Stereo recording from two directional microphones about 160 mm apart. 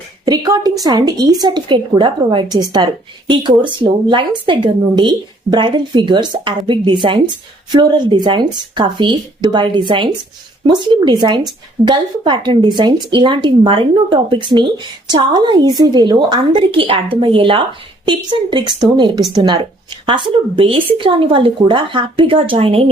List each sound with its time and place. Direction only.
0.3 s speech: 25° right (ahead or behind)